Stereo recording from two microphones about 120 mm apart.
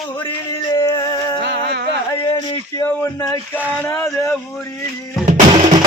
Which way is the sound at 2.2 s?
40° left (ahead or behind).